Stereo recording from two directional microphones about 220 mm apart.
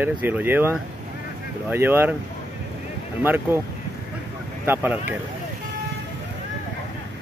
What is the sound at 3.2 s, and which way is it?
Speech, 10° right (ahead or behind).